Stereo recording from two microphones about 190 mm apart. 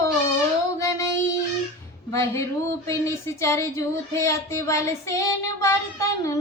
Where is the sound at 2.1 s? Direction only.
15° left (ahead or behind).